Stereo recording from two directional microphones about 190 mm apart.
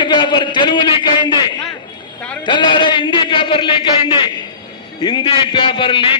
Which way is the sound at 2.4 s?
25° left (ahead or behind).